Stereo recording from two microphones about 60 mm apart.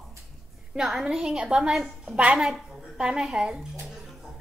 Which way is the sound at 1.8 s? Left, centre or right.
Centre.